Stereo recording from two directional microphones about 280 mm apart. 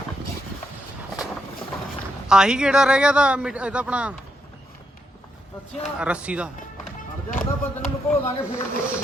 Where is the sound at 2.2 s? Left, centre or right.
Centre.